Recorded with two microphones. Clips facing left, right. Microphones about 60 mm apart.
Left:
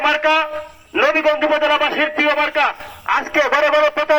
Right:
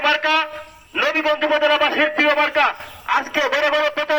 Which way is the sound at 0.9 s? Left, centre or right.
Left.